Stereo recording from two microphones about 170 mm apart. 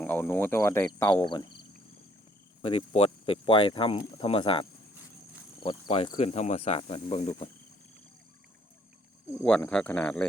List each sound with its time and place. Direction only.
0.0 s speech: 10° left (ahead or behind); by 4.6 s 30° left (ahead or behind)
5.6 s speech: 35° left (ahead or behind)
9.4 s speech: 5° left (ahead or behind)